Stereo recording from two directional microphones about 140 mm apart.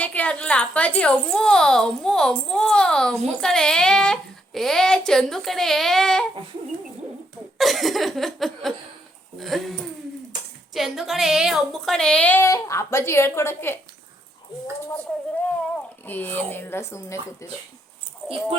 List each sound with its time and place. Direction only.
0.0 s a woman's voice: 10° left (ahead or behind)
7.6 s a child's voice: centre (ahead or behind)
10.8 s a woman's voice: centre (ahead or behind); by 13.7 s 15° left (ahead or behind)
14.9 s a woman's voice: 10° left (ahead or behind)
18.2 s dog: centre (ahead or behind)